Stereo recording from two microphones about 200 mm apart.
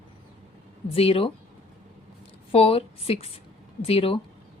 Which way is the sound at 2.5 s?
30° left (ahead or behind).